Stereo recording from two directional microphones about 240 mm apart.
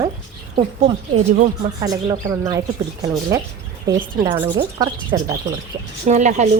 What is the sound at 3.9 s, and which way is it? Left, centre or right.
Speech, right.